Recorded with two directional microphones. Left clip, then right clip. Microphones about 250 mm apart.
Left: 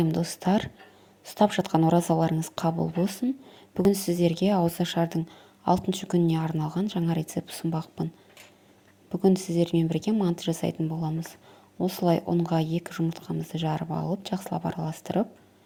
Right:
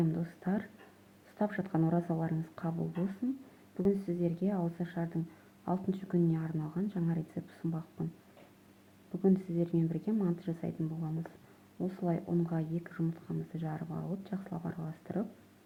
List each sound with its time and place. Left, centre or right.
0.1 s speech: left
9.2 s speech: left